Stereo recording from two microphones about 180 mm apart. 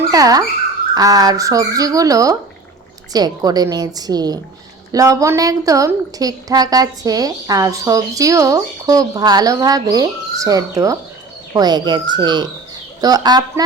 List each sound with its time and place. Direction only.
0.1 s dog: 20° right (ahead or behind)
0.9 s a woman's voice: 20° right (ahead or behind)